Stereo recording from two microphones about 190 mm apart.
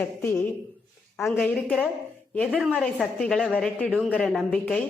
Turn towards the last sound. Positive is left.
turn(degrees=5)  # may be behind; listen again after turning